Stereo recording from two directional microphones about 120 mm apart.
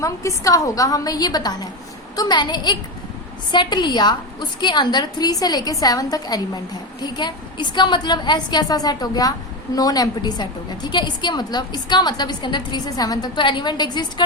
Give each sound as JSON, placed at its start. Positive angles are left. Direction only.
{"t": 0.0, "sound": "a woman's voice", "side_deg": 25}